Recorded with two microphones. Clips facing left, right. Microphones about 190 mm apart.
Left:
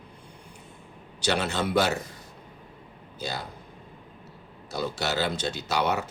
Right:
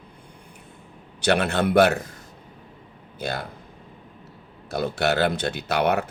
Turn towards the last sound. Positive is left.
turn(degrees=-60)  # may be behind; listen again after turning